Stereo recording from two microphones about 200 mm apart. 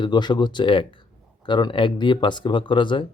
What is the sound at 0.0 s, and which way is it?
Speech, 20° left (ahead or behind).